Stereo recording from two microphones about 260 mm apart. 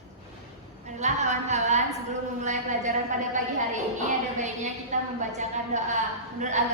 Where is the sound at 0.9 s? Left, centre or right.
Right.